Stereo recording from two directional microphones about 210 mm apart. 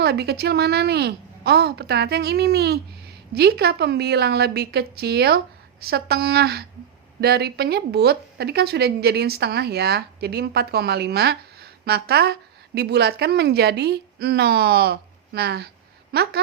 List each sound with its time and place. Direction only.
0.0 s a woman's voice: 50° right (ahead or behind)